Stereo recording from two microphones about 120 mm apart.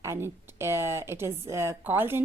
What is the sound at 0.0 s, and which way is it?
A woman's voice, 20° right (ahead or behind).